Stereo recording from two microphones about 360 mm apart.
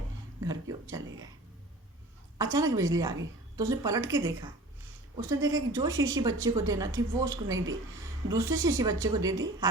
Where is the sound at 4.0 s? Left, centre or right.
Right.